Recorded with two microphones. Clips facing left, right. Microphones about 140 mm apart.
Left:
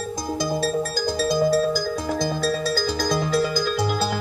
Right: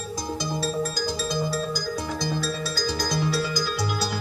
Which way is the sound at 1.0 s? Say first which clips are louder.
Left 6 dB; 55° left (ahead or behind).